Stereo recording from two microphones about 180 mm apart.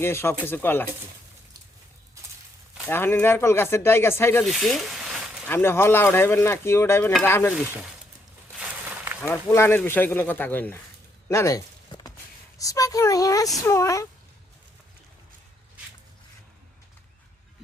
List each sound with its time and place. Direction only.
0.0 s speech: 15° left (ahead or behind)
2.8 s speech: 10° left (ahead or behind)
4.4 s speech: centre (ahead or behind)
5.5 s speech: 15° left (ahead or behind)
9.2 s speech: 15° left (ahead or behind)
11.3 s a sound: 15° left (ahead or behind)
12.5 s speech: 20° left (ahead or behind)